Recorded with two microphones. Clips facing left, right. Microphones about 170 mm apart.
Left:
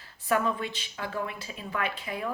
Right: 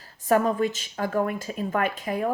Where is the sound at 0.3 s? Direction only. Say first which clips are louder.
Right 6 dB; 45° right (ahead or behind).